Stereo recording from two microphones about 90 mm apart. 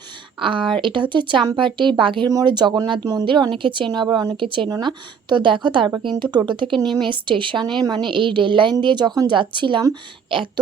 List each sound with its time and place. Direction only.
0.3 s a woman's voice: 70° right (ahead or behind)
2.3 s a woman's voice: 55° right (ahead or behind)
3.2 s a woman's voice: 65° right (ahead or behind)
4.4 s speech: 70° right (ahead or behind)
4.7 s a woman's voice: 55° right (ahead or behind)
10.2 s a sound: 70° right (ahead or behind)